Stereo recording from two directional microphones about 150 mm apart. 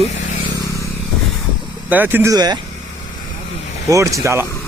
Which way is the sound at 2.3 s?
25° right (ahead or behind).